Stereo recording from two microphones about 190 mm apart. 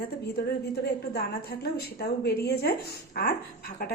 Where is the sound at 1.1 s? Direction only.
55° left (ahead or behind).